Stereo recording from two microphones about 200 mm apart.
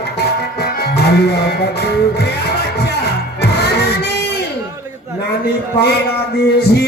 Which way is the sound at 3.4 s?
55° left (ahead or behind).